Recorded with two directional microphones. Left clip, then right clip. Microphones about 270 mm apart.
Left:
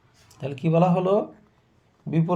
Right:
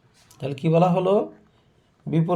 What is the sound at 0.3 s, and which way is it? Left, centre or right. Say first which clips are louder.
Speech: right 2 dB; centre.